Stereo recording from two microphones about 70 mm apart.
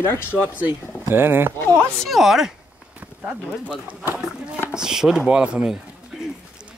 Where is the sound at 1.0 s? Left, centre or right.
Right.